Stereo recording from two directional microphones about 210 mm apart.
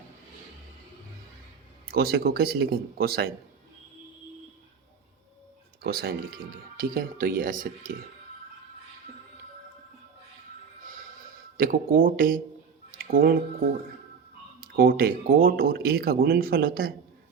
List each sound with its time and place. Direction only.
1.9 s speech: 45° right (ahead or behind)
5.8 s speech: 45° right (ahead or behind)
11.5 s speech: 40° right (ahead or behind)
12.9 s a sound: 45° right (ahead or behind)
14.6 s speech: 45° right (ahead or behind)